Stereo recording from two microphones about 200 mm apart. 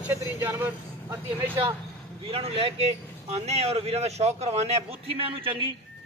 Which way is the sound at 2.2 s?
30° right (ahead or behind).